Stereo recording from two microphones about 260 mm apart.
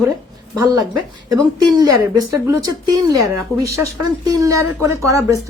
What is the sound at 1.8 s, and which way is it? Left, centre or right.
Speech, centre.